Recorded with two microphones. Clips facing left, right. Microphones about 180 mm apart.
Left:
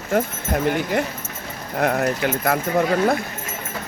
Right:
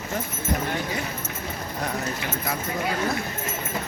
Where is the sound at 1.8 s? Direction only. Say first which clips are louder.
Left 11 dB; 65° left (ahead or behind).